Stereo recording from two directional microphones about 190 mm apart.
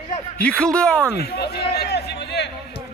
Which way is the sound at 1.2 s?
60° left (ahead or behind).